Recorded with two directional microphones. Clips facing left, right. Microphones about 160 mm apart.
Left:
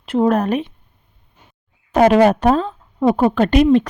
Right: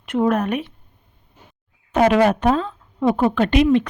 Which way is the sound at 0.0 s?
30° left (ahead or behind).